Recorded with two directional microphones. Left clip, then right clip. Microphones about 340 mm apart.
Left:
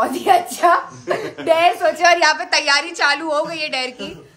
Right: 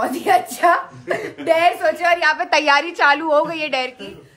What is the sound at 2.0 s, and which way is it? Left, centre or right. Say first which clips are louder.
Speech: left 4 dB; left.